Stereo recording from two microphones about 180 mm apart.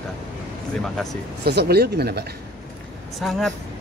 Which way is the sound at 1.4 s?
65° right (ahead or behind).